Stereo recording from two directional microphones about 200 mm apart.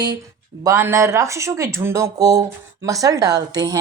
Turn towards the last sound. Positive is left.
turn(degrees=-20)  # may be behind; listen again after turning